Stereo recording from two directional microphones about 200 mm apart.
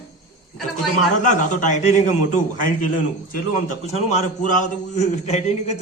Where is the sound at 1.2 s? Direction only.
40° left (ahead or behind).